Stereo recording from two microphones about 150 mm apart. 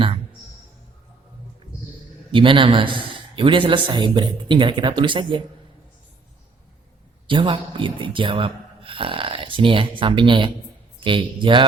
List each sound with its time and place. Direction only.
2.3 s a man's voice: 35° right (ahead or behind)
7.3 s a man's voice: 35° right (ahead or behind)